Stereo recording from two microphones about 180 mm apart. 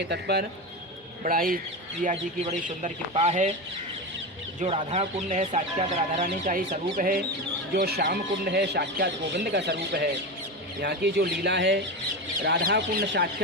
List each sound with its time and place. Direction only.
0.1 s speech: 65° right (ahead or behind)
1.2 s speech: 50° right (ahead or behind)
4.6 s speech: 35° right (ahead or behind); by 11.8 s 70° right (ahead or behind)
12.4 s speech: 55° right (ahead or behind)